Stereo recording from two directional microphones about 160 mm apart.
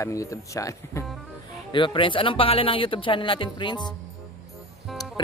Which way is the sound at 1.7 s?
30° left (ahead or behind).